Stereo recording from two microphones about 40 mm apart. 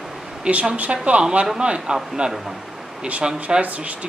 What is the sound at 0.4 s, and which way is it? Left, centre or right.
Speech, right.